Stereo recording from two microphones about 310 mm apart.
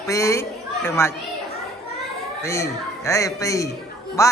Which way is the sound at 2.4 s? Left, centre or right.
Centre.